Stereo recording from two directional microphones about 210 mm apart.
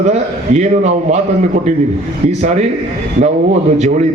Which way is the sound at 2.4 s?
30° right (ahead or behind).